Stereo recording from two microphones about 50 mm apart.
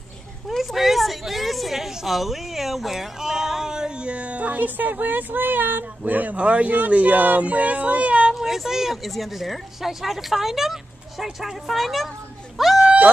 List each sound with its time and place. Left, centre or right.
0.5 s a woman's voice: centre; by 8.4 s right
8.4 s speech: centre
12.5 s a sound: centre